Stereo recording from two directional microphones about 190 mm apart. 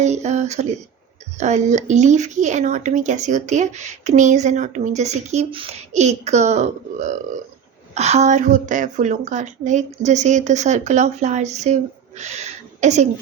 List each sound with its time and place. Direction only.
0.0 s speech: 35° right (ahead or behind)